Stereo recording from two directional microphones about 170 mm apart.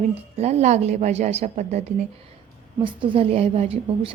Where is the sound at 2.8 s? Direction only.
30° right (ahead or behind).